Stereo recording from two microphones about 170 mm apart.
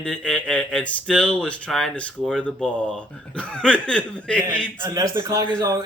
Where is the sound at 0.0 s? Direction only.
5° left (ahead or behind).